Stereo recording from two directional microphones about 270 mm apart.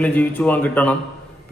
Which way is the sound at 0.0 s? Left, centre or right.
Centre.